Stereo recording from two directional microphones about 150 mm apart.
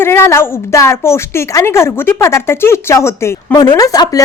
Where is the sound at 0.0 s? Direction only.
15° left (ahead or behind).